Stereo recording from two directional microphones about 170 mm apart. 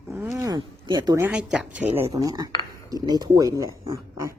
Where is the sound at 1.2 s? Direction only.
5° right (ahead or behind).